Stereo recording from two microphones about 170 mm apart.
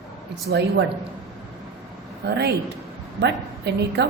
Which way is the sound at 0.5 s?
85° right.